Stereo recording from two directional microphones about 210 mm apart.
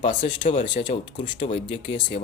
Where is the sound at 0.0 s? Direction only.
25° left (ahead or behind).